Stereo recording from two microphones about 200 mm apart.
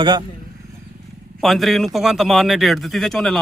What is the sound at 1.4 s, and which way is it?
Speech, centre (ahead or behind).